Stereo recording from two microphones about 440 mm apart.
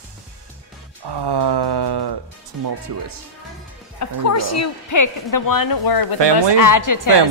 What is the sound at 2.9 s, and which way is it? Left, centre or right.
Speech, right.